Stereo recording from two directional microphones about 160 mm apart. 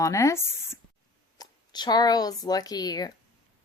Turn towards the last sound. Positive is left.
turn(degrees=25)  # may be behind; listen again after turning